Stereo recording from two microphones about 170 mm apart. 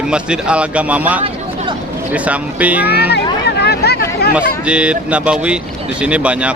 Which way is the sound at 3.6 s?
75° left (ahead or behind).